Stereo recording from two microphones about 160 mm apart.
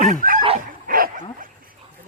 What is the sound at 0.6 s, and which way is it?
Dog, 60° right (ahead or behind).